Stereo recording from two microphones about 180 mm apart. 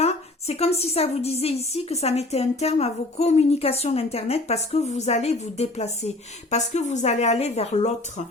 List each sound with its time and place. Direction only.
0.0 s speech: 35° left (ahead or behind)